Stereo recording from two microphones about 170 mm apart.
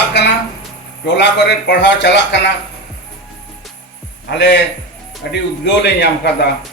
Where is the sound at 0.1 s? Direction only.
90° left.